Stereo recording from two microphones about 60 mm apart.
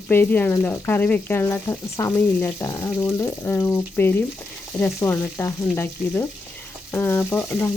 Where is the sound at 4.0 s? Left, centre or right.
Left.